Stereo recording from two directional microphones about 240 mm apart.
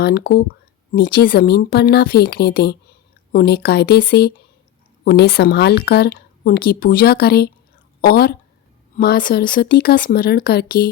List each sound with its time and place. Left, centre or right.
0.0 s speech: left